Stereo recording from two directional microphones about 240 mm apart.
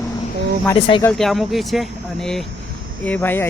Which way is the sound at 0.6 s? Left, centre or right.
Left.